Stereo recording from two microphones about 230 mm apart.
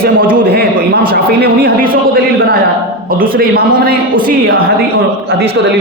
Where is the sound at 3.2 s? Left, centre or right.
Right.